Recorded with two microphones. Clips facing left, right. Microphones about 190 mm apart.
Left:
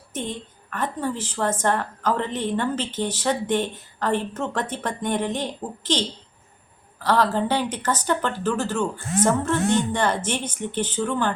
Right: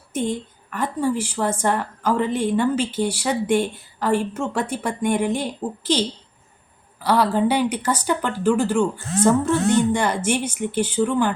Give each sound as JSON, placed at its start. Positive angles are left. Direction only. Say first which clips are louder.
{"t": 0.1, "sound": "a woman's voice", "louder": "right 6 dB", "side_deg": -10}